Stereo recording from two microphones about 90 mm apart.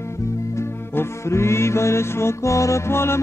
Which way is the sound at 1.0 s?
30° left (ahead or behind).